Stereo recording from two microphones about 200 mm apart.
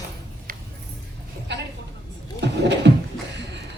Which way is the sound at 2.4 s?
60° right (ahead or behind).